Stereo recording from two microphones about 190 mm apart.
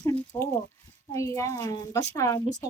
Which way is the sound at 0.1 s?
10° left (ahead or behind).